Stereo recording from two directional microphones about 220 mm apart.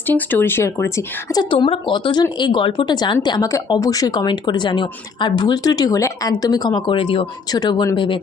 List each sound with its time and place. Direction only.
0.0 s speech: 10° left (ahead or behind)